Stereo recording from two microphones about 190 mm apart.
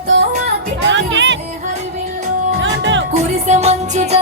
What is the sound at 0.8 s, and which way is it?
Music, 70° right (ahead or behind).